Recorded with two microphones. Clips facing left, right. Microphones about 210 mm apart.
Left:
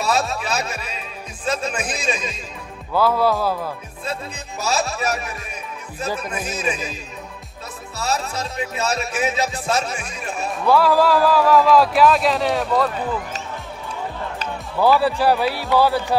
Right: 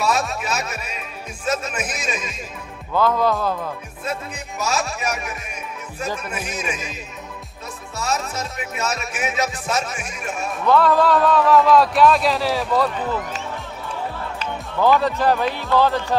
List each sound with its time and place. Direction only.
0.1 s speech: 35° left (ahead or behind)
2.9 s speech: 5° left (ahead or behind)
4.6 s speech: 35° left (ahead or behind)
6.6 s speech: 35° left (ahead or behind)
8.0 s speech: 30° left (ahead or behind)
10.6 s speech: 5° left (ahead or behind)
14.8 s speech: 5° left (ahead or behind)